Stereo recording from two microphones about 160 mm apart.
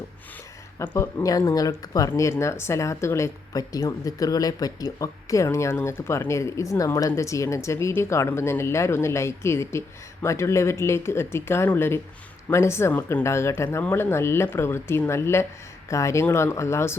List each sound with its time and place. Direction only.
0.8 s speech: 20° left (ahead or behind)